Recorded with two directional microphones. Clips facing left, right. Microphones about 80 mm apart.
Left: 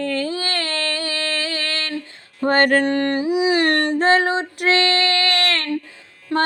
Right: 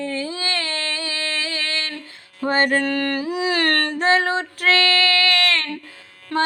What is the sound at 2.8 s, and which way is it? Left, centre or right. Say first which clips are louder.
Music: left 3 dB; left.